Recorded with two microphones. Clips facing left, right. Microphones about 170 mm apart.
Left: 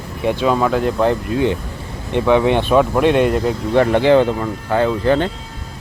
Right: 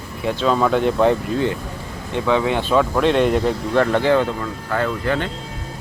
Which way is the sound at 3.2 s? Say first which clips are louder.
Left 1 dB; 5° left (ahead or behind).